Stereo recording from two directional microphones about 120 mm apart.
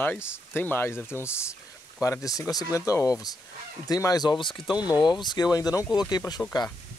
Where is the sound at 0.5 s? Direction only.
15° left (ahead or behind); by 6.4 s 35° left (ahead or behind).